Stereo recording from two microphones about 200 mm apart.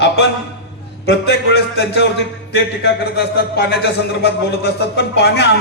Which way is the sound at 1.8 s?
60° left (ahead or behind).